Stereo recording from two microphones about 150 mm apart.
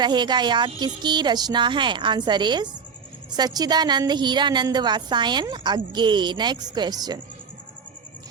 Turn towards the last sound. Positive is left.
turn(degrees=-25)  # may be behind; listen again after turning